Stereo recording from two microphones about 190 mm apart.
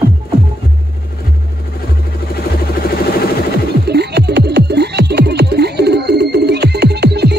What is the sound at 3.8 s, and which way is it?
Music, 60° right (ahead or behind).